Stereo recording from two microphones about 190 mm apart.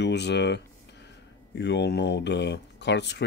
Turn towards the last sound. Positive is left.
turn(degrees=65)  # may be behind; listen again after turning